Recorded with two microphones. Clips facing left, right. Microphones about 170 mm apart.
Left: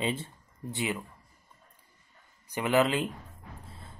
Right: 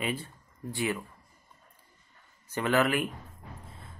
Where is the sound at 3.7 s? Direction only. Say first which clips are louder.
Even; 30° left (ahead or behind).